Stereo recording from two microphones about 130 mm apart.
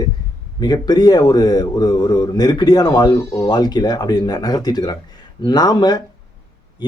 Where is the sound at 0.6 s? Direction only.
30° left (ahead or behind).